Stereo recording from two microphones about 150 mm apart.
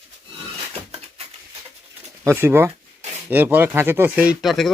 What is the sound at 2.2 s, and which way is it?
Speech, 15° right (ahead or behind).